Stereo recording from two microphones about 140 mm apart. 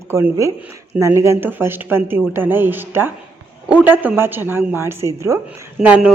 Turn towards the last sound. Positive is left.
turn(degrees=-10)  # may be behind; listen again after turning